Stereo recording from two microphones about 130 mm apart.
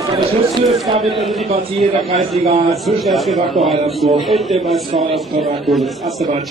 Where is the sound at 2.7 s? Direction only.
Centre (ahead or behind).